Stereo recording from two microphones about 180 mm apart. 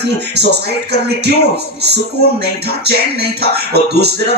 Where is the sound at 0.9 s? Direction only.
65° right (ahead or behind).